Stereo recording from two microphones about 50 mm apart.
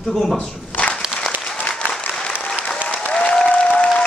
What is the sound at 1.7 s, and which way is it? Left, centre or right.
Applause, left.